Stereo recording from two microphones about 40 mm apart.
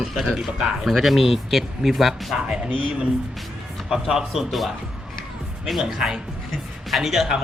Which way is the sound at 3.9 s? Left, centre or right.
Centre.